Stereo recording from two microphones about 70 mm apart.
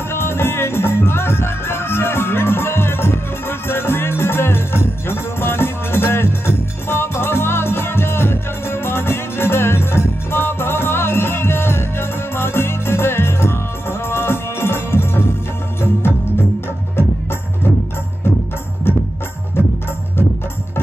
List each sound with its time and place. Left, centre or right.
0.1 s music: left
18.9 s music: left